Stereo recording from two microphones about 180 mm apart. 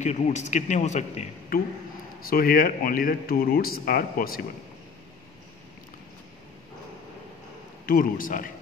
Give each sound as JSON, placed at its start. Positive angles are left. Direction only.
{"t": 0.0, "sound": "a man's voice", "side_deg": 40}
{"t": 2.2, "sound": "speech", "side_deg": 55}
{"t": 7.8, "sound": "a man's voice", "side_deg": 50}